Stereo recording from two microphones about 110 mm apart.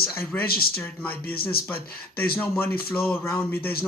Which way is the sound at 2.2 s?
15° left (ahead or behind).